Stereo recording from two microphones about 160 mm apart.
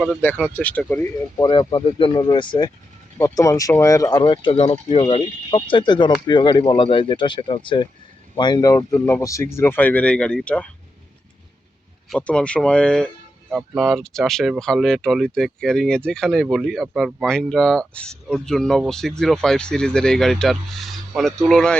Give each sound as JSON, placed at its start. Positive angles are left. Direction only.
{"t": 0.2, "sound": "speech", "side_deg": 10}
{"t": 1.4, "sound": "speech", "side_deg": 30}
{"t": 3.2, "sound": "speech", "side_deg": 20}
{"t": 4.2, "sound": "speech", "side_deg": 30}
{"t": 12.0, "sound": "speech", "side_deg": 5}